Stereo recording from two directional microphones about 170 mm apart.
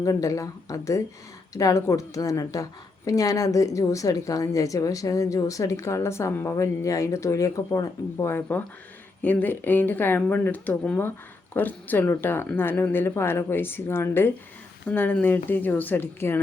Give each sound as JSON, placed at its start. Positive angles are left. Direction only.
{"t": 0.0, "sound": "a woman's voice", "side_deg": 20}